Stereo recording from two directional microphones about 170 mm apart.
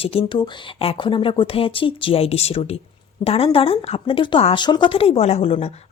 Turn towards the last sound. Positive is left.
turn(degrees=35)  # may be behind; listen again after turning